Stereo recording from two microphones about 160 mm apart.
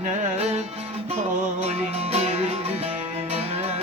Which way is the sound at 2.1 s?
40° right (ahead or behind).